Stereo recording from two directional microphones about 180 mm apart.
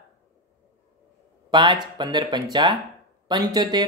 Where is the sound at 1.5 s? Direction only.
25° right (ahead or behind).